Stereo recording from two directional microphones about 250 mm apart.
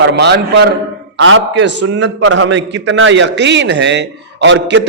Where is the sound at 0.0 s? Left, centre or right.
Right.